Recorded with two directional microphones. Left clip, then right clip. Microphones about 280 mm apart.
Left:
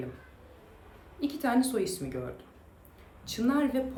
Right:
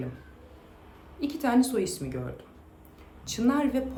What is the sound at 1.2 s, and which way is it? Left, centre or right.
Speech, centre.